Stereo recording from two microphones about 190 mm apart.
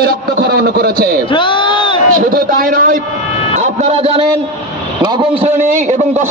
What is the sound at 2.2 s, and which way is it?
Speech, 50° right (ahead or behind).